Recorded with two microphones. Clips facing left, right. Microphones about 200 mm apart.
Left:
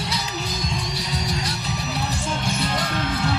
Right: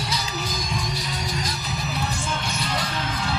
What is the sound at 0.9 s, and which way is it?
Music, 70° left (ahead or behind).